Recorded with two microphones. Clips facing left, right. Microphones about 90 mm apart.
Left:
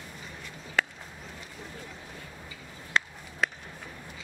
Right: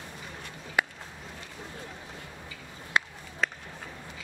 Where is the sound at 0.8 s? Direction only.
10° right (ahead or behind).